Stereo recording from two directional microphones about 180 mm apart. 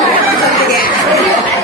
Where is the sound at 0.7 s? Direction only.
55° left (ahead or behind).